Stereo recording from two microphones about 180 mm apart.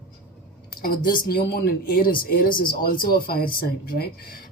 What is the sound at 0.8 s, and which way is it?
Speech, 50° left (ahead or behind).